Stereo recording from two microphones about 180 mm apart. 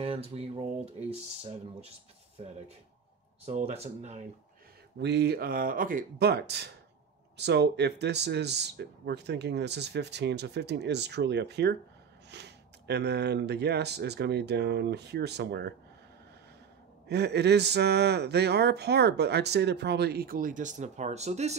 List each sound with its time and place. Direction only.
0.0 s speech: 35° right (ahead or behind)
5.0 s speech: 70° right (ahead or behind)
17.1 s speech: 65° right (ahead or behind); by 21.5 s 40° right (ahead or behind)